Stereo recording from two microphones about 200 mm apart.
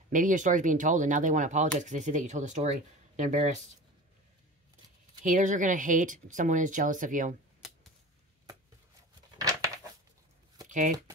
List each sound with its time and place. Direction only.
0.1 s speech: 40° right (ahead or behind)
5.2 s speech: 40° right (ahead or behind)
10.7 s speech: 40° right (ahead or behind)